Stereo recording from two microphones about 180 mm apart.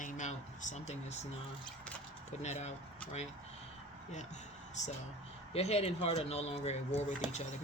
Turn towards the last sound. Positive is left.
turn(degrees=40)  # may be behind; listen again after turning